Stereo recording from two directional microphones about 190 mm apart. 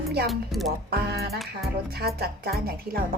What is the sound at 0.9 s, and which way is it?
A woman's voice, 55° right (ahead or behind).